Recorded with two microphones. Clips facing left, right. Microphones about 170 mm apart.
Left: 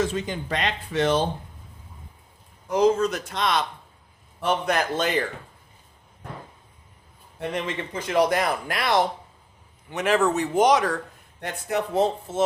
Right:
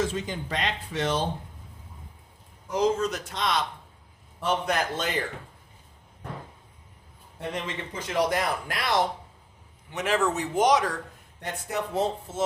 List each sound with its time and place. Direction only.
0.1 s speech: 65° left (ahead or behind)
2.6 s speech: 60° left (ahead or behind)
7.5 s speech: 60° left (ahead or behind)
9.9 s speech: 60° left (ahead or behind)